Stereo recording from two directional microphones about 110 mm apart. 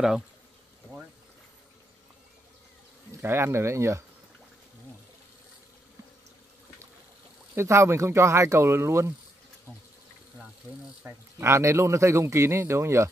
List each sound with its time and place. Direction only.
3.2 s speech: 25° right (ahead or behind)
7.5 s speech: 25° right (ahead or behind)
11.1 s speech: 25° right (ahead or behind)